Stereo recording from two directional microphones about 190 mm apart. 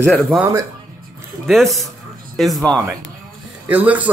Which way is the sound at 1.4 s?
Centre (ahead or behind).